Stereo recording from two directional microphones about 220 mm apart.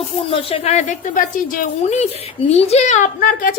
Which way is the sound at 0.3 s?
25° left (ahead or behind).